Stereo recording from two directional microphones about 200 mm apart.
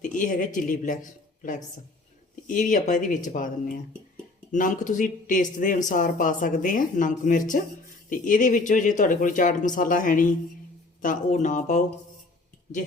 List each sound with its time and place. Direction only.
0.2 s a woman's voice: 40° left (ahead or behind)
4.5 s speech: 40° left (ahead or behind)